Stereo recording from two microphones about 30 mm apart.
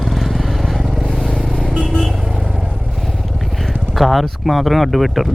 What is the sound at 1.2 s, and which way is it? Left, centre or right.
Vehicle, centre.